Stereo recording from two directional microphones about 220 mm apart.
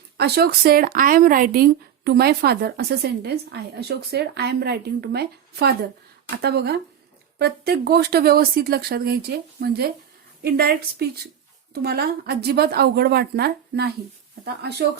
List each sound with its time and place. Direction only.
0.2 s speech: 45° right (ahead or behind)